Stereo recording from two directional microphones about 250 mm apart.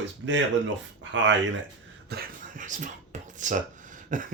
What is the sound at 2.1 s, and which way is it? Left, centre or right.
Speech, right.